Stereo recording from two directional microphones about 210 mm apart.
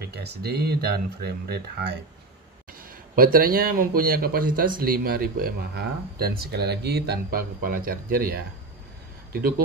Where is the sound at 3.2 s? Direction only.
45° right (ahead or behind).